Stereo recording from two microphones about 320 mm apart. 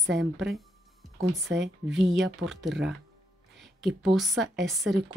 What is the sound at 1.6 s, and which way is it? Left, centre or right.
A woman's voice, centre.